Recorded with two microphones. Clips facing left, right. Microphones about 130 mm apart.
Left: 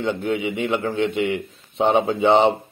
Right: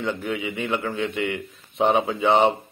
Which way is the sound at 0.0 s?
25° left (ahead or behind).